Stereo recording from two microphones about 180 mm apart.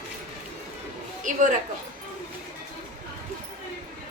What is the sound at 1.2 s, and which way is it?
Speech, 45° right (ahead or behind).